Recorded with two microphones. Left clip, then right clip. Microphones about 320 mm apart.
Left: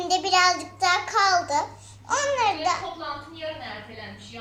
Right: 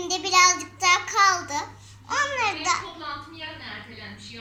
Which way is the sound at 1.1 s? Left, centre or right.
Centre.